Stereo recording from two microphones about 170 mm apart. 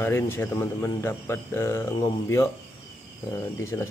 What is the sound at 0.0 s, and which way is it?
Speech, 15° left (ahead or behind).